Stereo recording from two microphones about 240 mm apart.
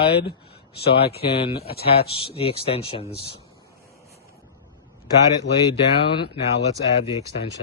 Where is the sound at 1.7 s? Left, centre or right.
Left.